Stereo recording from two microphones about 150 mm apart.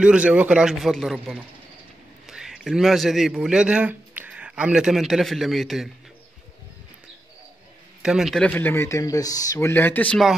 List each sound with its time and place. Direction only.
0.0 s a man's voice: 5° right (ahead or behind)
8.0 s a man's voice: 5° right (ahead or behind)
8.5 s speech: 10° left (ahead or behind)